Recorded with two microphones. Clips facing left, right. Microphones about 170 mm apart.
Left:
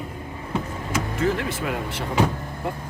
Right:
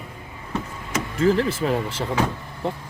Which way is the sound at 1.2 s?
30° right (ahead or behind).